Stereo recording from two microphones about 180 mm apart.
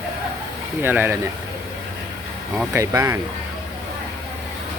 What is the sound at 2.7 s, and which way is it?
Speech, 15° right (ahead or behind).